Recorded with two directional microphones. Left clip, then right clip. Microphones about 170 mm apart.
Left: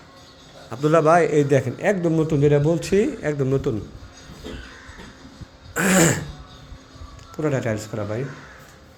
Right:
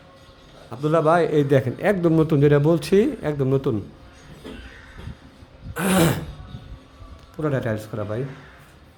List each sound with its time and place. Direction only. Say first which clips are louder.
0.7 s a man's voice: left 2 dB; 5° right (ahead or behind); by 3.1 s 35° right (ahead or behind)
3.2 s speech: even; 25° right (ahead or behind)
5.7 s throat clearing: left 2 dB; 15° right (ahead or behind)
7.3 s speech: left 1 dB; 20° right (ahead or behind)